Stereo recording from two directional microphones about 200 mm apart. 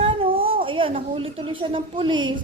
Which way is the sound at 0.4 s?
25° right (ahead or behind).